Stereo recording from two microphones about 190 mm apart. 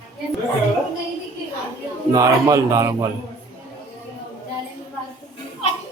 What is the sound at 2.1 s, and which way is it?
Speech, 15° right (ahead or behind).